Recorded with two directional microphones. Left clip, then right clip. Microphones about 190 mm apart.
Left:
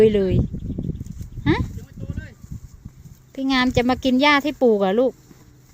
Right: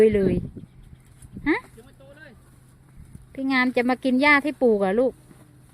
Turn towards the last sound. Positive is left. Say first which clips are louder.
# left 3 dB
turn(degrees=15)  # may be behind; listen again after turning